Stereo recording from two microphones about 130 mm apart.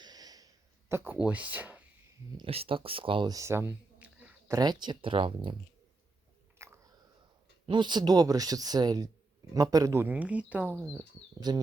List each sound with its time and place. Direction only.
0.0 s a sound: 30° right (ahead or behind); by 1.8 s 10° right (ahead or behind)
2.4 s speech: 45° right (ahead or behind)
3.2 s a sound: 25° right (ahead or behind)
4.4 s speech: 30° right (ahead or behind)
6.6 s biting: 20° right (ahead or behind)
7.7 s speech: 35° right (ahead or behind); by 11.0 s 15° right (ahead or behind)
11.3 s speech: 30° right (ahead or behind)